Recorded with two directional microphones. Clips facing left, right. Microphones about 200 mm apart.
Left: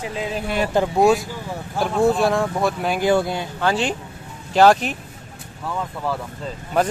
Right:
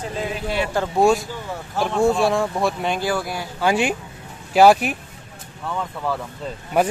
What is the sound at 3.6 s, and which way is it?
Speech, 10° right (ahead or behind).